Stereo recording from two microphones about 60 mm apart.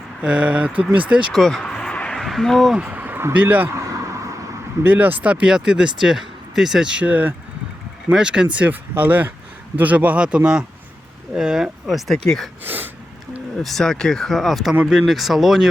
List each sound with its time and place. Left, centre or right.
0.2 s speech: centre
1.3 s speech: centre
2.7 s a sound: right
3.3 s speech: right
3.8 s vehicle: right
4.8 s speech: right
8.1 s speech: centre
8.6 s speech: right; by 12.1 s centre
12.1 s speech: centre
12.6 s gasp: right
13.6 s speech: centre